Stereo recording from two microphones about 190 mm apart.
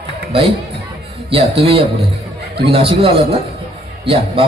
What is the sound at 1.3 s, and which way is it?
A man's voice, 30° right (ahead or behind).